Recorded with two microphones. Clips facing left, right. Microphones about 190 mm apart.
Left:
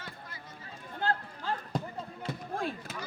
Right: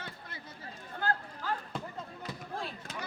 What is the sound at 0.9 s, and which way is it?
Chatter, 25° left (ahead or behind).